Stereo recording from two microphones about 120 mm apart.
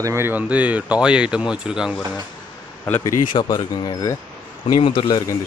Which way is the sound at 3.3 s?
40° left (ahead or behind).